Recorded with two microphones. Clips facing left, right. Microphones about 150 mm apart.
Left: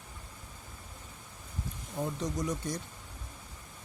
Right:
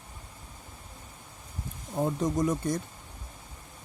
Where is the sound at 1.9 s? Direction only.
50° right (ahead or behind).